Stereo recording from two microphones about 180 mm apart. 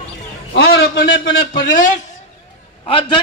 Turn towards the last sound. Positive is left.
turn(degrees=25)  # may be behind; listen again after turning